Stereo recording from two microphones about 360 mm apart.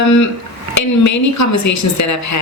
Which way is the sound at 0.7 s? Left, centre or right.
Left.